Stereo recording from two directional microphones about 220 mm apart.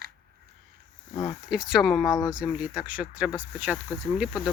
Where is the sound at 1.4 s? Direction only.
Centre (ahead or behind).